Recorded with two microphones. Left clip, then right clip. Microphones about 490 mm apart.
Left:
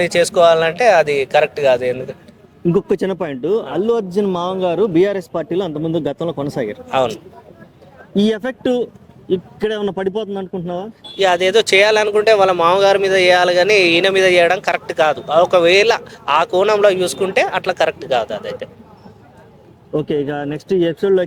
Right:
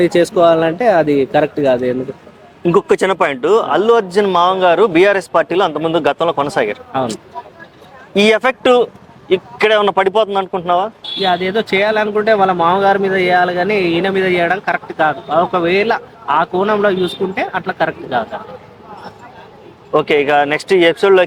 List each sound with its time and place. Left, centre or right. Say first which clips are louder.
0.0 s a man's voice: right 1 dB; left
3.0 s a man's voice: right 7 dB; right
8.1 s speech: right 7 dB; right
10.4 s speech: right 10 dB; centre
11.2 s speech: left 2 dB; left
20.0 s speech: right 8 dB; right